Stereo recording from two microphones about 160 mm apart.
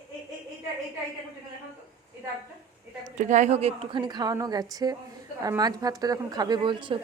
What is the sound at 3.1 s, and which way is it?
A woman's voice, 50° right (ahead or behind).